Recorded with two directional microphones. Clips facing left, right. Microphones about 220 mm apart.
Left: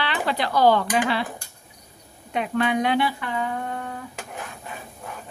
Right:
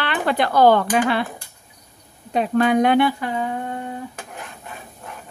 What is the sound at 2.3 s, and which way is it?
Speech, 40° right (ahead or behind).